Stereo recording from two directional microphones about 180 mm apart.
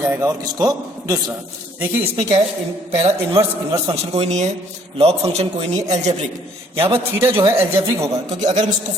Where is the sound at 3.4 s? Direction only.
15° right (ahead or behind).